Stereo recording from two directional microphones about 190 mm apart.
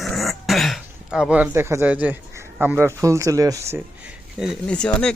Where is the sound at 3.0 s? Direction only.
15° right (ahead or behind).